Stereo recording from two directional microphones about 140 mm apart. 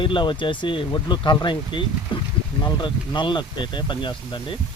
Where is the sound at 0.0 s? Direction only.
35° left (ahead or behind).